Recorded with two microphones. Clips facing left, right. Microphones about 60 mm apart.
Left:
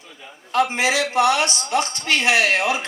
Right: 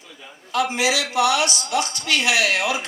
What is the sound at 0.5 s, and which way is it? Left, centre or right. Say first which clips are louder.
A man's voice: left 2 dB; left.